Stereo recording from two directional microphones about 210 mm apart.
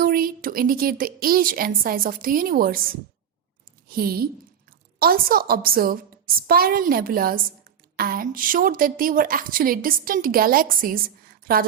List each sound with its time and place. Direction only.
0.0 s a woman's voice: 45° right (ahead or behind)